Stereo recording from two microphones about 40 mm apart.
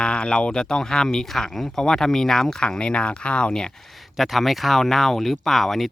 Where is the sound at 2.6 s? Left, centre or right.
Left.